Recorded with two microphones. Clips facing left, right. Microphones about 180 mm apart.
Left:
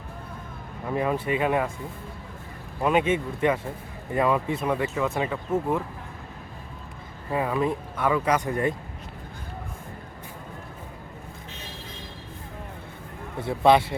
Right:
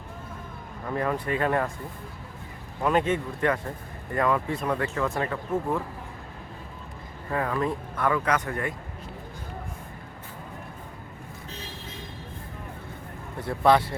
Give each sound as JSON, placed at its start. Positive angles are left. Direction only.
{"t": 0.9, "sound": "speech", "side_deg": 15}
{"t": 2.8, "sound": "speech", "side_deg": 15}
{"t": 7.3, "sound": "speech", "side_deg": 15}
{"t": 13.6, "sound": "speech", "side_deg": 20}